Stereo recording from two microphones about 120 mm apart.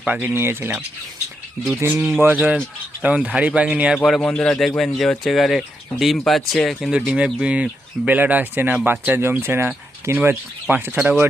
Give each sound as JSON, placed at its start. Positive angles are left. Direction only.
{"t": 0.0, "sound": "speech", "side_deg": -15}
{"t": 3.9, "sound": "speech", "side_deg": 5}